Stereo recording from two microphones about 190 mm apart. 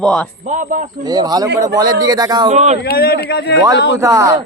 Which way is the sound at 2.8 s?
55° left (ahead or behind).